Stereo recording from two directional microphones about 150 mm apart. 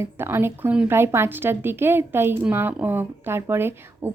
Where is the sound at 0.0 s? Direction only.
15° right (ahead or behind).